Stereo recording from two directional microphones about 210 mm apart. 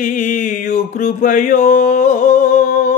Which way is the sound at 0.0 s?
35° left (ahead or behind).